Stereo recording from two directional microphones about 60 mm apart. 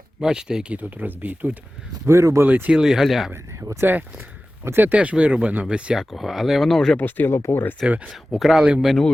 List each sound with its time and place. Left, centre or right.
0.2 s speech: centre
0.7 s speech: right
2.0 s speech: right
2.4 s speech: right
2.7 s speech: centre
3.3 s speech: right
3.9 s speech: right
4.9 s speech: right
6.0 s speech: centre
6.9 s speech: left
7.3 s speech: left
7.8 s speech: centre